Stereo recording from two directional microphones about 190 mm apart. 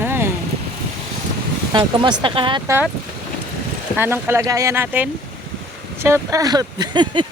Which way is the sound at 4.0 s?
10° right (ahead or behind).